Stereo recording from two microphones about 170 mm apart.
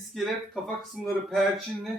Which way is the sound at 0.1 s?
Centre (ahead or behind).